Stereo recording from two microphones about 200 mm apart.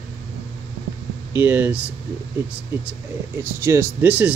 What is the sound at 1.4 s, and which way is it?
Speech, 10° right (ahead or behind).